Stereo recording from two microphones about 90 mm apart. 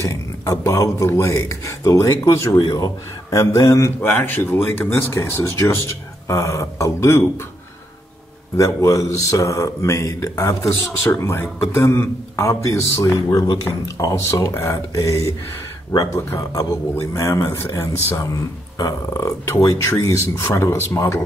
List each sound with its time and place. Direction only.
0.0 s speech: 35° left (ahead or behind)
4.0 s speech: 20° left (ahead or behind)
8.5 s speech: 35° left (ahead or behind)
18.8 s speech: 40° left (ahead or behind)